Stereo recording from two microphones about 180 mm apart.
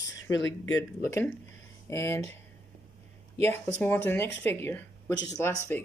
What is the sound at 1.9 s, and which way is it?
Speech, 15° left (ahead or behind).